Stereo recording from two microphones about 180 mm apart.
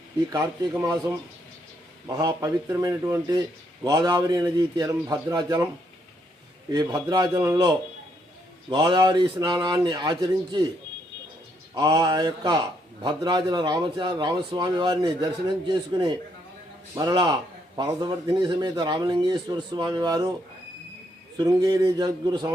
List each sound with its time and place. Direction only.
0.3 s a man's voice: 20° right (ahead or behind)
6.7 s a man's voice: 20° right (ahead or behind)
11.7 s a man's voice: 20° right (ahead or behind)
21.3 s a man's voice: 20° right (ahead or behind)